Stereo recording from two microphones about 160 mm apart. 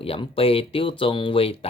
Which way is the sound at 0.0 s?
35° left (ahead or behind).